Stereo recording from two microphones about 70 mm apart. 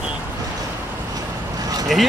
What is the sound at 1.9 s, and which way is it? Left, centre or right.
Speech, centre.